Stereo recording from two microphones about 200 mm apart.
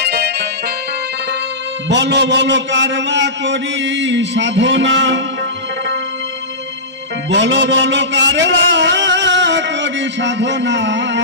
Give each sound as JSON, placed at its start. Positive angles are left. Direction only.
{"t": 0.0, "sound": "music", "side_deg": -55}
{"t": 1.9, "sound": "a man's voice", "side_deg": -60}
{"t": 7.2, "sound": "a sound", "side_deg": -65}